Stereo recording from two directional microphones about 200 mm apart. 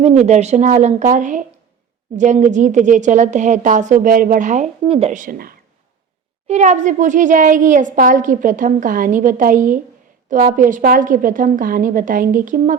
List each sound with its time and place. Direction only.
0.0 s a woman's voice: 35° right (ahead or behind)
6.5 s a woman's voice: 35° right (ahead or behind)